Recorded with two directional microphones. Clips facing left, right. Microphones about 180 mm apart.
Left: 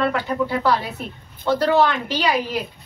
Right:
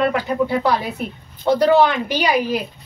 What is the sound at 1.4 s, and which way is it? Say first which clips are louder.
Speech: right 3 dB; 15° right (ahead or behind).